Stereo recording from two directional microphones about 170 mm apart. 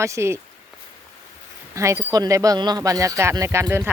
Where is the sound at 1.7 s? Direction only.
15° right (ahead or behind).